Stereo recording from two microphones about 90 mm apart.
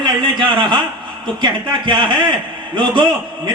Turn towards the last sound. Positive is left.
turn(degrees=-60)  # may be behind; listen again after turning